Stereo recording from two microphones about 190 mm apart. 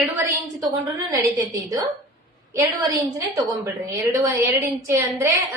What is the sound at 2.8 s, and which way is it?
A woman's voice, 15° right (ahead or behind).